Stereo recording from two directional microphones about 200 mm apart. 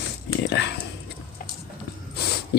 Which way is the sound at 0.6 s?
60° left (ahead or behind).